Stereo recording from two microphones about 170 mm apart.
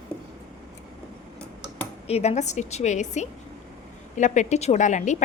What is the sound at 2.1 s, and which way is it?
A woman's voice, 40° left (ahead or behind).